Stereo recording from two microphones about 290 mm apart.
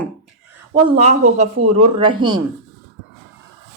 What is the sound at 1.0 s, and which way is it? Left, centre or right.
Speech, right.